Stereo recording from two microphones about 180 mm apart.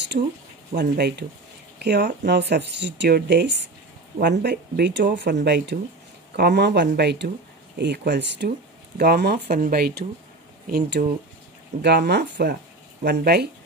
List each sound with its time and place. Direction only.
0.1 s speech: 50° right (ahead or behind)
0.7 s speech: 65° right (ahead or behind)
8.9 s speech: 60° right (ahead or behind)